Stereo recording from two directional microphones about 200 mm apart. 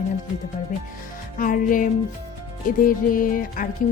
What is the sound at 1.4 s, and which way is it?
Speech, 45° left (ahead or behind).